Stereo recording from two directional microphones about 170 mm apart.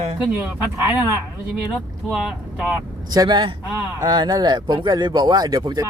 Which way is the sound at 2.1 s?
Centre (ahead or behind).